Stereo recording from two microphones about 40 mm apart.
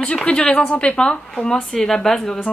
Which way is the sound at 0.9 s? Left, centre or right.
Centre.